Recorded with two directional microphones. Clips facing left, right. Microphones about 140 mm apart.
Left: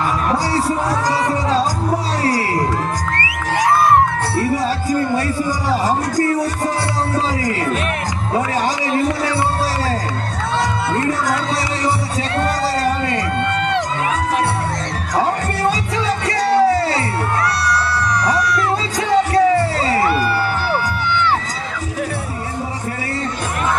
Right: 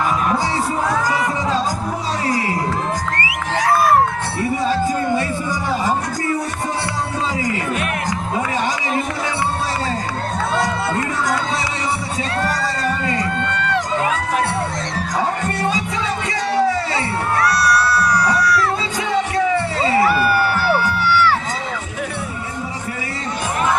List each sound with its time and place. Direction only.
1.0 s music: 35° left (ahead or behind)
3.5 s a sound: 25° left (ahead or behind)
12.5 s a sound: 35° left (ahead or behind)
13.6 s crowd: 25° left (ahead or behind)
16.2 s music: 40° left (ahead or behind)
17.4 s music: 25° left (ahead or behind)
18.9 s music: 40° left (ahead or behind)
20.1 s music: 25° left (ahead or behind)